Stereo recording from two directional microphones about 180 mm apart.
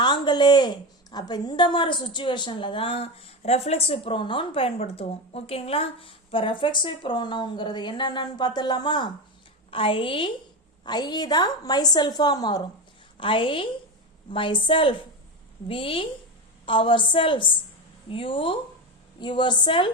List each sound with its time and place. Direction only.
0.0 s a woman's voice: 25° left (ahead or behind)